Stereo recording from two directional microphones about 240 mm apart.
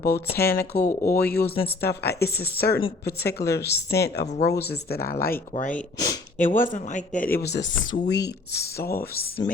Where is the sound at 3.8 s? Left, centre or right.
Left.